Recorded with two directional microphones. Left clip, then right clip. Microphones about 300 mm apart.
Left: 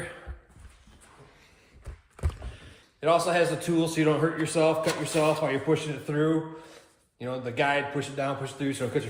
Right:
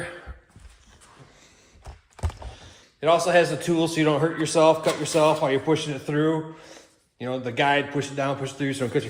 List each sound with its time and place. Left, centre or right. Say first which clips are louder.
3.0 s a man's voice: right 4 dB; right